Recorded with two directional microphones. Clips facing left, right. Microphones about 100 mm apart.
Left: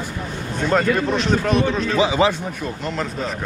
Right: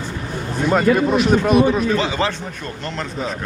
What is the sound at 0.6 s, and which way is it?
Speech, 10° right (ahead or behind).